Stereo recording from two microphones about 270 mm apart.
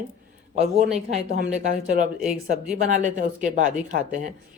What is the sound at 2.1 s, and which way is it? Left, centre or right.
Speech, centre.